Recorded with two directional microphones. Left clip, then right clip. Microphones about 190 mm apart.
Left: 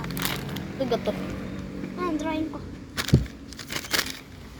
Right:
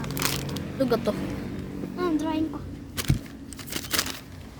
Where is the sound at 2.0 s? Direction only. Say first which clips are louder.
Right 1 dB; 30° right (ahead or behind).